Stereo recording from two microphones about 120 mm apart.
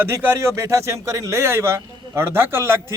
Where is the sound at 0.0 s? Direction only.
20° right (ahead or behind).